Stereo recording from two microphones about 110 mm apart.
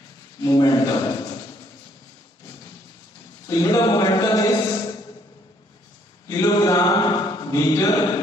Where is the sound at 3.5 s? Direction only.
35° left (ahead or behind).